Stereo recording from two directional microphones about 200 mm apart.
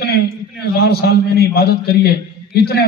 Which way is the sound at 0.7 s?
50° left (ahead or behind).